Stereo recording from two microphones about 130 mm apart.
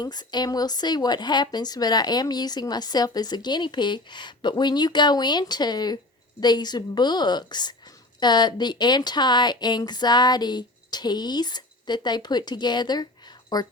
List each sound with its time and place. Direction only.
0.0 s speech: 30° left (ahead or behind)